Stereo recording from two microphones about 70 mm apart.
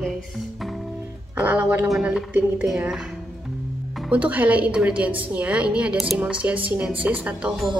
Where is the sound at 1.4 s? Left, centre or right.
Centre.